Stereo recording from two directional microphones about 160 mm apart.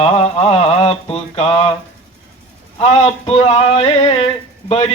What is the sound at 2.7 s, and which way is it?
Mantra, 40° left (ahead or behind).